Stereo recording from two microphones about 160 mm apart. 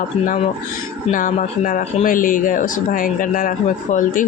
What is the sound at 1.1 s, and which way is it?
Speech, 55° left (ahead or behind).